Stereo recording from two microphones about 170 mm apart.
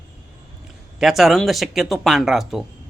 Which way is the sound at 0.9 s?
Centre (ahead or behind).